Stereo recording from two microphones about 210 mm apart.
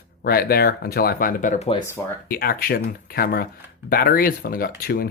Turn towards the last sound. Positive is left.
turn(degrees=45)  # may be behind; listen again after turning